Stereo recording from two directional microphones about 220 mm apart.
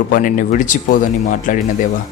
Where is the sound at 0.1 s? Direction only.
35° left (ahead or behind).